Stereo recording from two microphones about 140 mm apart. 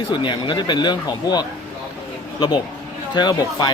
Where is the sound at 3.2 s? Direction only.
30° left (ahead or behind).